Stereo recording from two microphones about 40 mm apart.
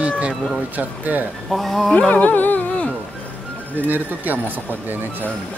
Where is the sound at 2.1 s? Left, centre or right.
Left.